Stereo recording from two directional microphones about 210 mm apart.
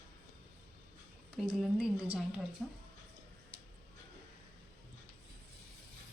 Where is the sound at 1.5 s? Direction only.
Centre (ahead or behind).